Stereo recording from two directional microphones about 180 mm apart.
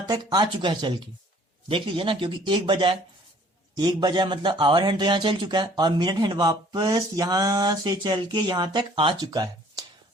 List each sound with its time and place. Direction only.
0.0 s speech: 25° right (ahead or behind)